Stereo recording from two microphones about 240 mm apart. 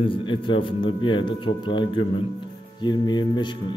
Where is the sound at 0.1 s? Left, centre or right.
Left.